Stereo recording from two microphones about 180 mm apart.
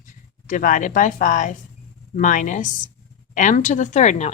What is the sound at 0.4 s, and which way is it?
A woman's voice, 45° left (ahead or behind).